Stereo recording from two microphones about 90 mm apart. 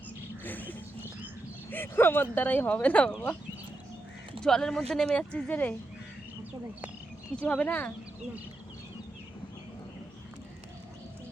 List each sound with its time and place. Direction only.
0.4 s a sound: 20° left (ahead or behind)
1.7 s speech: 25° left (ahead or behind)
4.4 s speech: 5° left (ahead or behind)
7.3 s speech: 15° left (ahead or behind)